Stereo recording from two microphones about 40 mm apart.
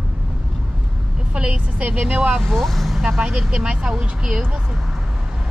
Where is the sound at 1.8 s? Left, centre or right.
Right.